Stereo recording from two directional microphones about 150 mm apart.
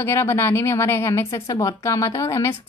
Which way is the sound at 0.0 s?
15° left (ahead or behind).